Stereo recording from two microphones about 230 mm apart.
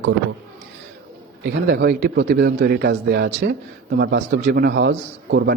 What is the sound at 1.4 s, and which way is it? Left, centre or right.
A man's voice, right.